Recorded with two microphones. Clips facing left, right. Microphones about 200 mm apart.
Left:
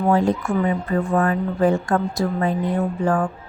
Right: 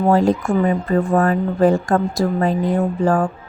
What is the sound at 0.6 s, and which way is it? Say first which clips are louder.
Speech: right 4 dB; 30° right (ahead or behind).